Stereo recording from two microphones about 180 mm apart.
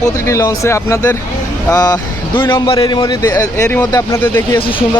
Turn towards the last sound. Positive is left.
turn(degrees=30)  # may be behind; listen again after turning